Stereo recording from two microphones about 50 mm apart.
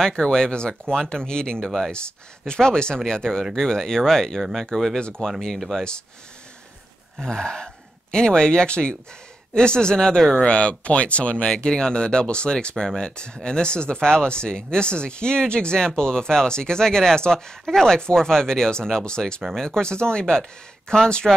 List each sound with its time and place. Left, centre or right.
0.0 s speech: centre
5.6 s speech: centre
7.2 s speech: centre